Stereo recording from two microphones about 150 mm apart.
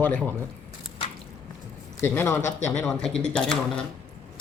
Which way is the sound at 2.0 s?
15° left (ahead or behind).